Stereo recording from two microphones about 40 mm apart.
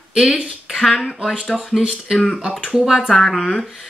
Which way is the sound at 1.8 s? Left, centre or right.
Centre.